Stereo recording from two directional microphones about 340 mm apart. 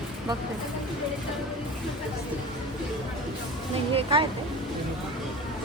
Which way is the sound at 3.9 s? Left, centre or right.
Centre.